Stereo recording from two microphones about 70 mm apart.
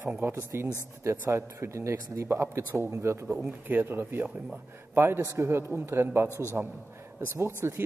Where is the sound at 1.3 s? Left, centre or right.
Right.